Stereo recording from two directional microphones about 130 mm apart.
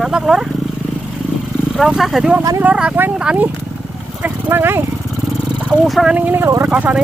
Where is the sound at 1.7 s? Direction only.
Centre (ahead or behind).